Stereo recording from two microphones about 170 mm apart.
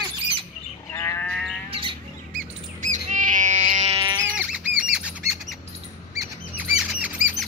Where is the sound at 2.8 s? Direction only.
45° right (ahead or behind).